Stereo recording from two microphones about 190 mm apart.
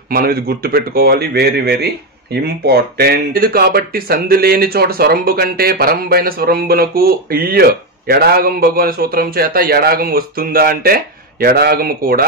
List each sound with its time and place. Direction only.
0.1 s speech: 55° right (ahead or behind)